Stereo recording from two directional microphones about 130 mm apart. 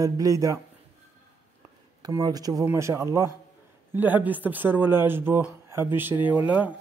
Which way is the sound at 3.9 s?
15° right (ahead or behind).